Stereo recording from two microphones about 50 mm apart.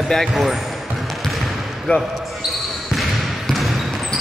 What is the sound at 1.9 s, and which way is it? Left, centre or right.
Speech, left.